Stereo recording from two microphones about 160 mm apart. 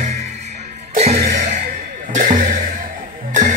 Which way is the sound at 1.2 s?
55° right (ahead or behind).